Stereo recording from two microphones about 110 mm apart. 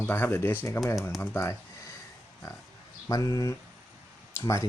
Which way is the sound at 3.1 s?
30° left (ahead or behind).